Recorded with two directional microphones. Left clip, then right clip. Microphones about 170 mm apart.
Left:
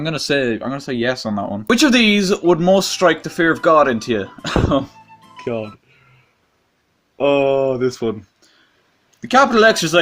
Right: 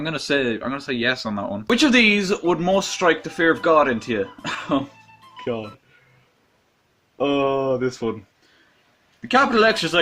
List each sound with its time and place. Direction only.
0.0 s speech: 45° left (ahead or behind)
7.2 s speech: 30° left (ahead or behind)
9.2 s speech: 40° left (ahead or behind)